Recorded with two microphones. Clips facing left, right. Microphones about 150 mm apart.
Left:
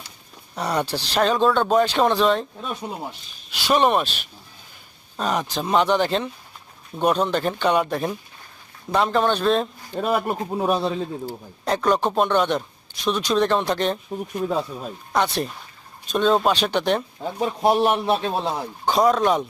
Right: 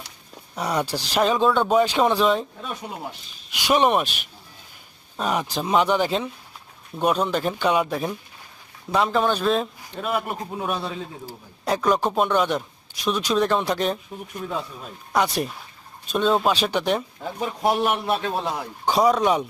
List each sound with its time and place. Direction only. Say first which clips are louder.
0.5 s speech: left 1 dB; 10° right (ahead or behind)
3.5 s speech: even; 10° right (ahead or behind)
10.0 s a man's voice: left 4 dB; 40° left (ahead or behind)
11.6 s speech: left 1 dB; 5° right (ahead or behind)
15.1 s speech: even; 5° right (ahead or behind)
17.4 s a man's voice: left 3 dB; 25° left (ahead or behind)
18.9 s speech: left 1 dB; 5° right (ahead or behind)